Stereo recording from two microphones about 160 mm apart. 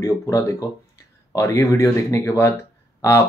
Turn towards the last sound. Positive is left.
turn(degrees=20)  # may be behind; listen again after turning